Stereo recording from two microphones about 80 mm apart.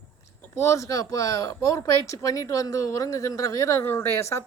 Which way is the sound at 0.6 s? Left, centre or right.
Left.